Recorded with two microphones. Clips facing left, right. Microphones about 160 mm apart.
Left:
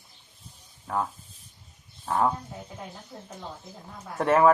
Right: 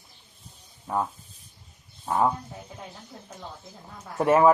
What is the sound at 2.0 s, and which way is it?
Speech, 15° right (ahead or behind).